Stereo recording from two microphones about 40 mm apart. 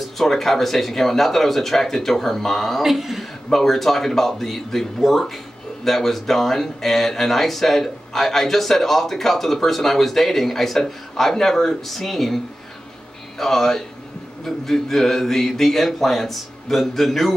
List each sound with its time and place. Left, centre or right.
0.0 s speech: centre
3.4 s speech: centre
13.4 s speech: centre